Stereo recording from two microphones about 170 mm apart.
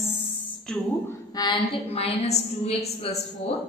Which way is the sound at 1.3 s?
30° left (ahead or behind).